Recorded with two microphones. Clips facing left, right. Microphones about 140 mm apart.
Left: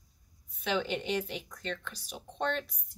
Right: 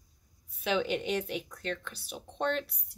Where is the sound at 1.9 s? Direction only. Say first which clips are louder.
Right 2 dB; 10° left (ahead or behind).